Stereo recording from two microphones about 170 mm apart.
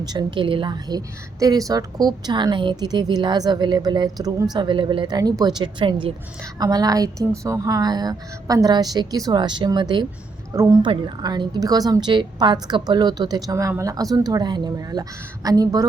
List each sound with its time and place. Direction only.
0.0 s a woman's voice: 25° right (ahead or behind)